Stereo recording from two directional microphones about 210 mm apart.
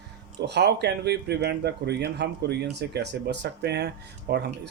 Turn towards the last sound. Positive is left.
turn(degrees=-50)  # may be behind; listen again after turning